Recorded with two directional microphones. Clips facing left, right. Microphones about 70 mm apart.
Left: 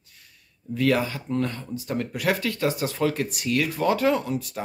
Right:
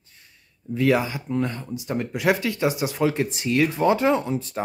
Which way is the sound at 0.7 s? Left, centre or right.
Centre.